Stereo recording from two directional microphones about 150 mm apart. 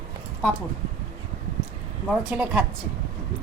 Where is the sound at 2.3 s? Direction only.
10° right (ahead or behind).